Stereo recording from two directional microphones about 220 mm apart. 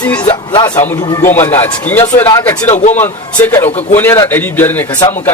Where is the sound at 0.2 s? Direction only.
20° left (ahead or behind).